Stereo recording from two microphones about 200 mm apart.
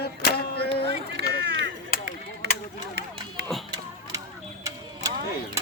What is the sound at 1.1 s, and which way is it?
Run, 60° right (ahead or behind).